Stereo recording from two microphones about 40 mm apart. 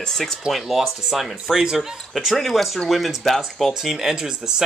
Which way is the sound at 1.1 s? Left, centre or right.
Centre.